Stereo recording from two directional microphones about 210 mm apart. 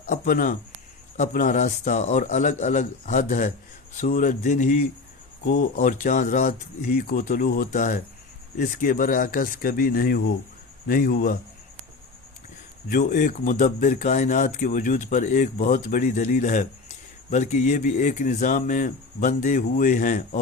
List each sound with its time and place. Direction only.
0.1 s a man's voice: 40° left (ahead or behind)
12.9 s a man's voice: 40° left (ahead or behind)